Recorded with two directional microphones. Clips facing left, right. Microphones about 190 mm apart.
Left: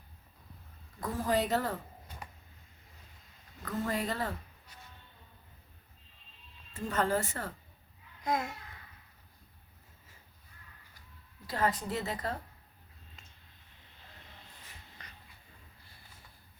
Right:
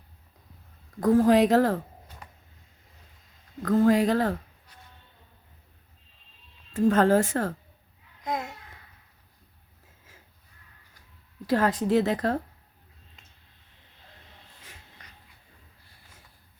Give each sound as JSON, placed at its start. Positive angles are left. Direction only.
{"t": 1.1, "sound": "speech", "side_deg": -90}
{"t": 3.6, "sound": "speech", "side_deg": -70}
{"t": 6.7, "sound": "speech", "side_deg": -90}
{"t": 8.2, "sound": "babbling", "side_deg": -20}
{"t": 11.4, "sound": "speech", "side_deg": -90}